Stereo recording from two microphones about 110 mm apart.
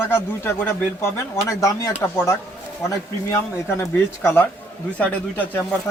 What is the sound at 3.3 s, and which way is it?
Speech, 25° left (ahead or behind).